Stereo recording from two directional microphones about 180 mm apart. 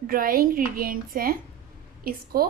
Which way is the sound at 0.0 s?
50° right (ahead or behind).